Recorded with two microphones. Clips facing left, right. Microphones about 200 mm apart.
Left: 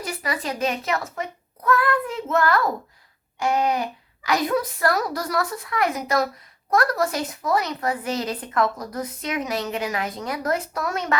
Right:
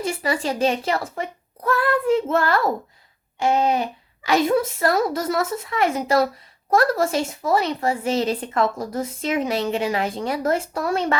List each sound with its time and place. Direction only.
0.0 s speech: 30° right (ahead or behind)